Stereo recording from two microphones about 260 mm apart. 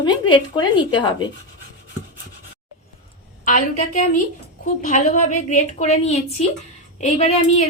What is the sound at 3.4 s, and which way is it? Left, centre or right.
A woman's voice, left.